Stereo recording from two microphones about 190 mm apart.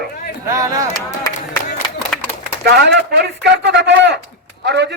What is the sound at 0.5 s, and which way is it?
Speech, 15° right (ahead or behind).